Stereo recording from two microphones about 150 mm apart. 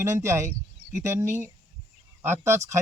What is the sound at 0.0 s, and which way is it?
Speech, 20° right (ahead or behind).